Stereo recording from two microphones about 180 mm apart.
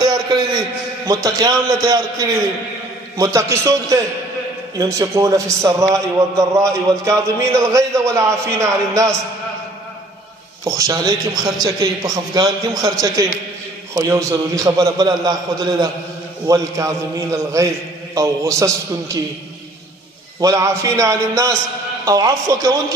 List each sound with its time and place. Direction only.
0.0 s a sound: 25° right (ahead or behind)
3.2 s a man's voice: 15° right (ahead or behind)
10.6 s a man's voice: 20° right (ahead or behind)
13.9 s a man's voice: 15° right (ahead or behind)
20.3 s a man's voice: 15° right (ahead or behind)